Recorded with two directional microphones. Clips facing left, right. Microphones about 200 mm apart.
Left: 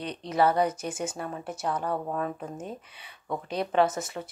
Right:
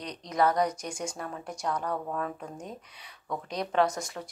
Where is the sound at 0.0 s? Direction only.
30° left (ahead or behind).